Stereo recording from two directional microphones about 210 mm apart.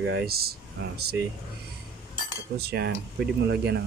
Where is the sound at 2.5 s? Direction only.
50° right (ahead or behind).